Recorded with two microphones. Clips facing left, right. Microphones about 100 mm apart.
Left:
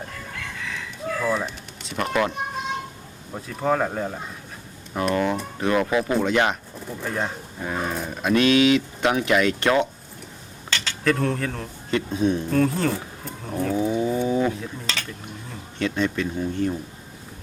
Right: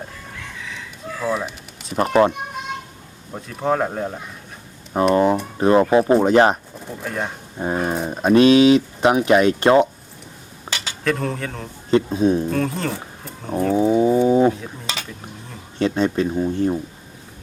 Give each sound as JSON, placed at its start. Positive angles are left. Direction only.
{"t": 1.2, "sound": "a sound", "side_deg": -5}
{"t": 2.0, "sound": "speech", "side_deg": -30}
{"t": 3.3, "sound": "speech", "side_deg": -5}
{"t": 5.1, "sound": "speech", "side_deg": -30}
{"t": 7.0, "sound": "speech", "side_deg": 0}
{"t": 7.6, "sound": "speech", "side_deg": -35}
{"t": 10.7, "sound": "cutlery", "side_deg": -15}
{"t": 11.0, "sound": "speech", "side_deg": 0}
{"t": 11.9, "sound": "speech", "side_deg": -30}
{"t": 12.5, "sound": "speech", "side_deg": 0}
{"t": 13.7, "sound": "wild animals", "side_deg": -30}
{"t": 14.3, "sound": "a sound", "side_deg": -30}
{"t": 14.9, "sound": "dishes", "side_deg": -15}
{"t": 15.8, "sound": "speech", "side_deg": -35}